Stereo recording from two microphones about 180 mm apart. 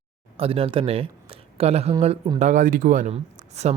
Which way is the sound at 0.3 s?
30° right (ahead or behind).